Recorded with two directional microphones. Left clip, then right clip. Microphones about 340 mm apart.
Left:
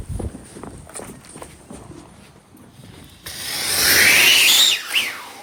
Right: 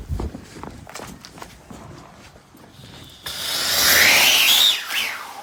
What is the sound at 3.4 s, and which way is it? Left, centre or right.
Rub, centre.